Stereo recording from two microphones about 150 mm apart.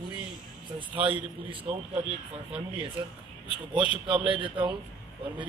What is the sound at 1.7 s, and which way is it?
Speech, 50° right (ahead or behind).